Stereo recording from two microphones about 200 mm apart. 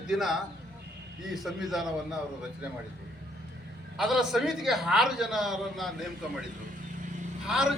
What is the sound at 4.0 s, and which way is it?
A man's voice, centre (ahead or behind).